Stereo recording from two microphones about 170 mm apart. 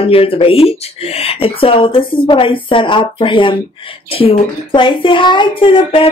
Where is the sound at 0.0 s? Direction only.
35° left (ahead or behind).